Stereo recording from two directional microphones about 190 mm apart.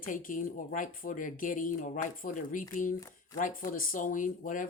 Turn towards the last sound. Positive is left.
turn(degrees=45)  # may be behind; listen again after turning